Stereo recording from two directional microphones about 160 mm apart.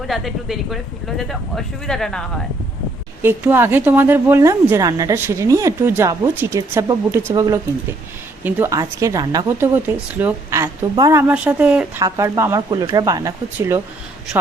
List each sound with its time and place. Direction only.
0.1 s speech: centre (ahead or behind)
3.2 s a woman's voice: 15° right (ahead or behind)
9.6 s a woman's voice: 10° right (ahead or behind)
11.9 s speech: 20° right (ahead or behind)